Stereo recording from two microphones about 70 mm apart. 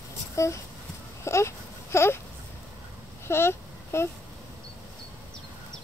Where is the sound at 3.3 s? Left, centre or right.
Left.